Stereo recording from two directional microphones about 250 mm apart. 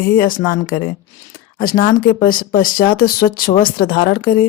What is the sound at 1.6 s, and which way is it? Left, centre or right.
Speech, left.